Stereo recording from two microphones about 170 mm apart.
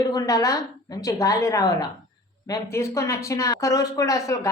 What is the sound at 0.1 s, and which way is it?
Speech, 20° left (ahead or behind).